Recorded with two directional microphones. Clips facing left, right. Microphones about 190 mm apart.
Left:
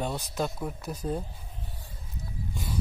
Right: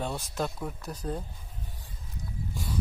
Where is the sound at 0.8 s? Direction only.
20° left (ahead or behind).